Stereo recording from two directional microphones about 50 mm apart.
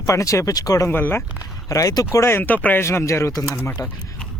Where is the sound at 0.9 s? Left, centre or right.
Left.